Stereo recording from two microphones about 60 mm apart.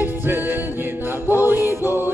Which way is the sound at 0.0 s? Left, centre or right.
Right.